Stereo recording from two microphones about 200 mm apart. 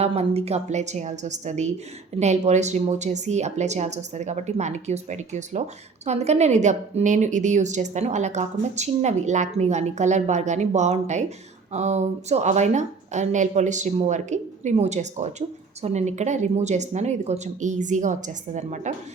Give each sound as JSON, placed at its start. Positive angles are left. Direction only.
{"t": 0.0, "sound": "a woman's voice", "side_deg": -30}